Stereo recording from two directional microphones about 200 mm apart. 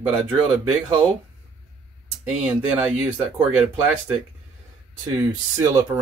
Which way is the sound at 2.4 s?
5° right (ahead or behind).